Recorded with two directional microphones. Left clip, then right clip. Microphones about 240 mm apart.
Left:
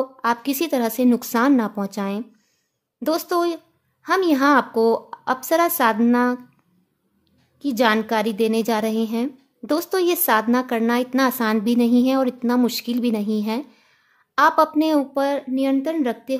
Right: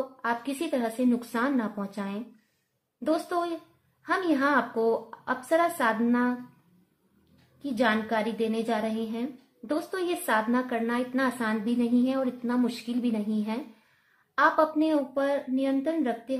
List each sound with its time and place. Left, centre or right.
0.2 s a woman's voice: left
7.6 s a woman's voice: left